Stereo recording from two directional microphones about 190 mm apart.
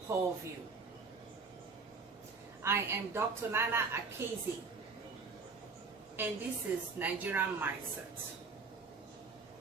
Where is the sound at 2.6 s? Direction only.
15° right (ahead or behind).